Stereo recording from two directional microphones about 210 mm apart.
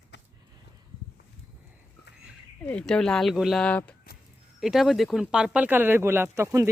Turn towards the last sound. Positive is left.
turn(degrees=-15)  # may be behind; listen again after turning